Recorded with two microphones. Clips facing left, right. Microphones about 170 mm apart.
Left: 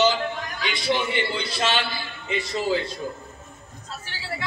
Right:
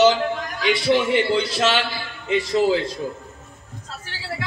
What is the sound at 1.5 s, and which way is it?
A man's voice, 80° right.